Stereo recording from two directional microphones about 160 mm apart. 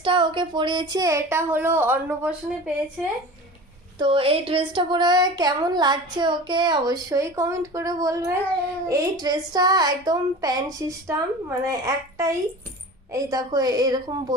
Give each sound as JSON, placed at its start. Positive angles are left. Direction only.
{"t": 0.0, "sound": "speech", "side_deg": -30}
{"t": 4.0, "sound": "speech", "side_deg": -35}